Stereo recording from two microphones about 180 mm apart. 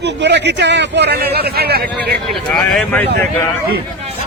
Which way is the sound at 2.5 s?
Centre (ahead or behind).